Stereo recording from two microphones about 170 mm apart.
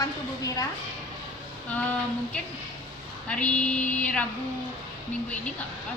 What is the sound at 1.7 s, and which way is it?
Speech, 10° left (ahead or behind).